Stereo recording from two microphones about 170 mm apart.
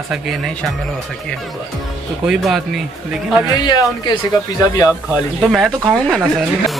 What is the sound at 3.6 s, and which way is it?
Speech, 25° left (ahead or behind).